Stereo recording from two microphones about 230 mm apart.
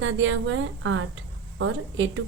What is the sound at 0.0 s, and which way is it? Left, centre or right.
A woman's voice, right.